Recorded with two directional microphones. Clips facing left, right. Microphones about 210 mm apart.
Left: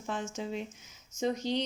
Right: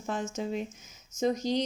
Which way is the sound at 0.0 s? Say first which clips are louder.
Right 3 dB; 40° right (ahead or behind).